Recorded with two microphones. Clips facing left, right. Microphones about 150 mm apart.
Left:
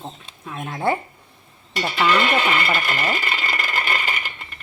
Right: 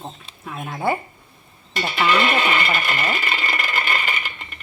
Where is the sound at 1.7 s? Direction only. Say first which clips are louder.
Left 1 dB; 20° right (ahead or behind).